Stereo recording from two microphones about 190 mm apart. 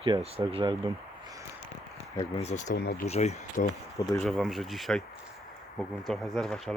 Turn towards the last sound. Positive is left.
turn(degrees=0)  # may be behind; listen again after turning